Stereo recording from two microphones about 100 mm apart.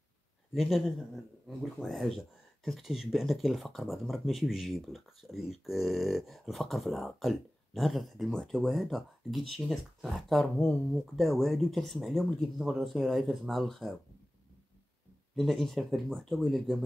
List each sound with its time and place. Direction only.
0.6 s speech: centre (ahead or behind)
15.3 s speech: 5° left (ahead or behind)